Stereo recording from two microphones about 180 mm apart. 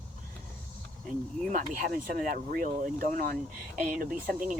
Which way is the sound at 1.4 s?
50° right (ahead or behind).